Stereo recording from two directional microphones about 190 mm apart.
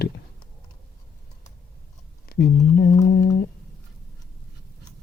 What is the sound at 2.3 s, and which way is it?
Speech, 55° left (ahead or behind).